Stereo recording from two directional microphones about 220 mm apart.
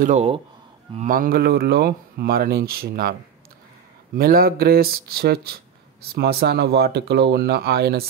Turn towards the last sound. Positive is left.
turn(degrees=-45)  # may be behind; listen again after turning